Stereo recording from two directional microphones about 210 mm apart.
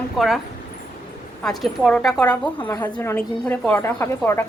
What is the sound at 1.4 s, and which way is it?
A woman's voice, centre (ahead or behind).